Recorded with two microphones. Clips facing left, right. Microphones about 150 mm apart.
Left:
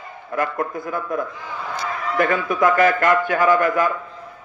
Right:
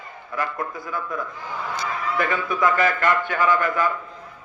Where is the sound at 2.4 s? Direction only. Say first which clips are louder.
Left 4 dB; 45° left (ahead or behind).